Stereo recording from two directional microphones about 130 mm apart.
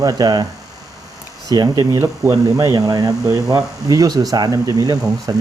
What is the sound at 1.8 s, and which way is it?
Speech, 20° right (ahead or behind).